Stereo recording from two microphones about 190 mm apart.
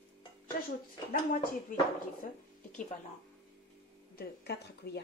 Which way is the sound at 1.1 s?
50° left (ahead or behind).